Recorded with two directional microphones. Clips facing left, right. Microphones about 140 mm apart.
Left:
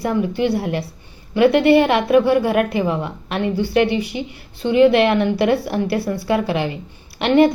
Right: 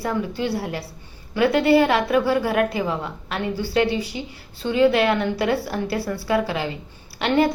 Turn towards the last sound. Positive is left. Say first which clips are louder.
# left 6 dB
turn(degrees=20)  # may be behind; listen again after turning